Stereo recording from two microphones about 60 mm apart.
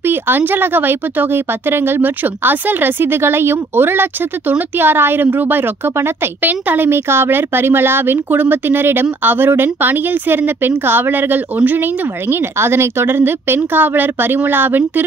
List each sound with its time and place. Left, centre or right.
0.0 s speech: right
6.4 s speech: right